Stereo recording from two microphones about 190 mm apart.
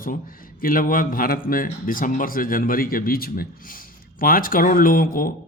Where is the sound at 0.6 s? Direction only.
45° left (ahead or behind).